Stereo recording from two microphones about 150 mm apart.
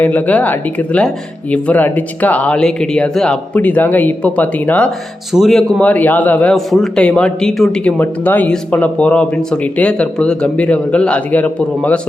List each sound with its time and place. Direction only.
0.0 s a man's voice: 10° left (ahead or behind)